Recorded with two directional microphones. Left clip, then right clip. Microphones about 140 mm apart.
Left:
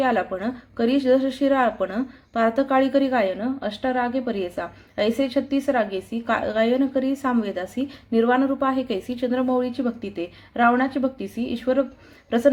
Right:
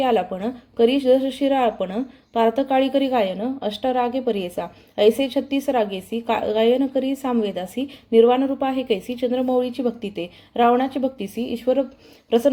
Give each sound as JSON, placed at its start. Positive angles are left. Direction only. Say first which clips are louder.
{"t": 0.0, "sound": "a woman's voice", "louder": "right 2 dB", "side_deg": -20}